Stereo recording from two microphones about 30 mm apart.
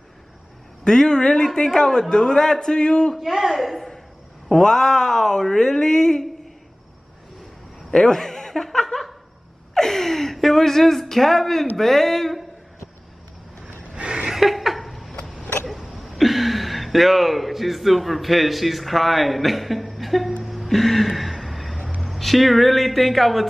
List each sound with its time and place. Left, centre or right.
0.8 s a man's voice: left
3.2 s a woman's voice: centre
4.5 s speech: centre
8.1 s speech: centre
8.6 s laughter: centre
9.8 s a woman's voice: centre
14.3 s a sound: centre
15.6 s speech: centre
20.4 s a sound: centre
22.0 s speech: centre